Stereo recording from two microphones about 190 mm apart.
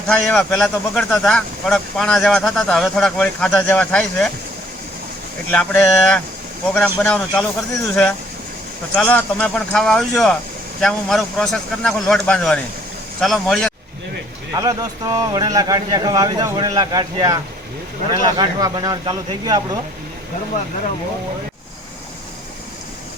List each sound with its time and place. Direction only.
0.1 s speech: 5° left (ahead or behind)
5.5 s speech: centre (ahead or behind)
9.0 s speech: 10° left (ahead or behind)
14.5 s speech: 20° right (ahead or behind)